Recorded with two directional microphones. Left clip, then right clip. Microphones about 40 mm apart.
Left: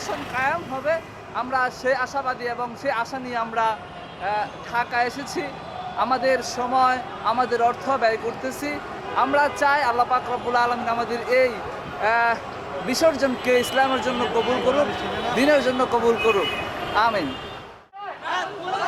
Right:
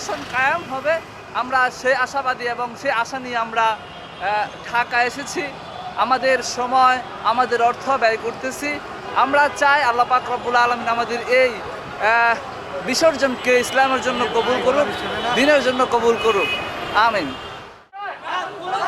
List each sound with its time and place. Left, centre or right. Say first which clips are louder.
0.3 s speech: right 5 dB; centre
16.5 s vehicle: right 3 dB; left
16.9 s speech: right 4 dB; centre